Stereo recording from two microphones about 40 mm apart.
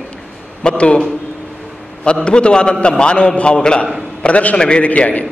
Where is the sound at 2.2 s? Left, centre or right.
Left.